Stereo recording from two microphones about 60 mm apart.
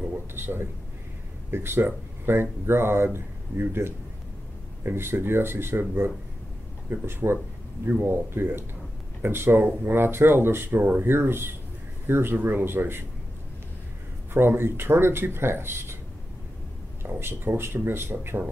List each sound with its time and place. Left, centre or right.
0.4 s a man's voice: right
14.3 s speech: right
17.2 s speech: right